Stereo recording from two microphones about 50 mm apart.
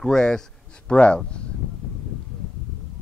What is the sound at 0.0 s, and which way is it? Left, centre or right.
Speech, centre.